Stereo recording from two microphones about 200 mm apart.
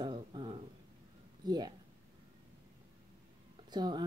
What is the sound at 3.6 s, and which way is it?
Speech, 20° right (ahead or behind).